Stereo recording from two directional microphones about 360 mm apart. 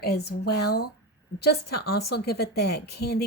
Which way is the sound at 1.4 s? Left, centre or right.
Left.